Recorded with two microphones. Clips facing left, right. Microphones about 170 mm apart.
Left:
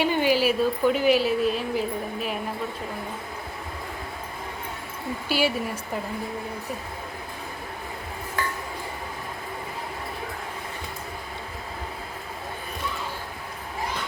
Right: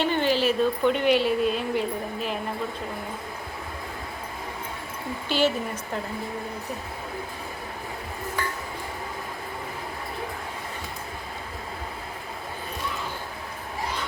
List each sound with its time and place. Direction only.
0.0 s speech: 10° left (ahead or behind)
5.3 s speech: 10° left (ahead or behind)